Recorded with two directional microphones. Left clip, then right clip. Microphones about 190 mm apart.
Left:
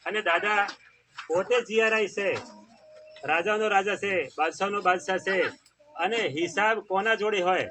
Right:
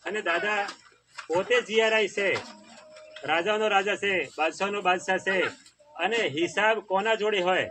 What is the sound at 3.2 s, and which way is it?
Speech, 15° right (ahead or behind).